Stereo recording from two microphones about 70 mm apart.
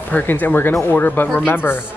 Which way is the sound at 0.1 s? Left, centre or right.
Left.